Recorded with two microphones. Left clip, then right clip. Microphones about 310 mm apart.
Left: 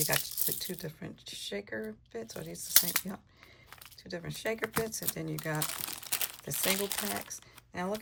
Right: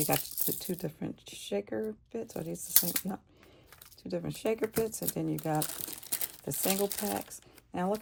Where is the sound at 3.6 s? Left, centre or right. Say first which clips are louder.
Left 7 dB; centre.